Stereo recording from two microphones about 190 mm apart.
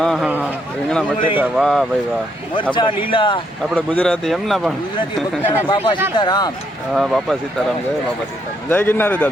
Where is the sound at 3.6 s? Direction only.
10° left (ahead or behind).